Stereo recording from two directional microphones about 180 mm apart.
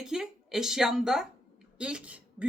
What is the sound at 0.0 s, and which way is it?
Speech, 5° right (ahead or behind).